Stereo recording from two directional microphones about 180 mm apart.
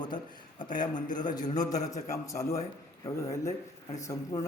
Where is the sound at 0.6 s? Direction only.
25° left (ahead or behind).